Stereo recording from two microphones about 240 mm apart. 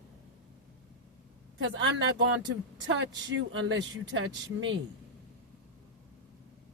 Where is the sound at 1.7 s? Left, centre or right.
Right.